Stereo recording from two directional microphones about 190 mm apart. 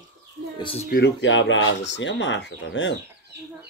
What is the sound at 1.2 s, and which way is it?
Speech, 75° left (ahead or behind).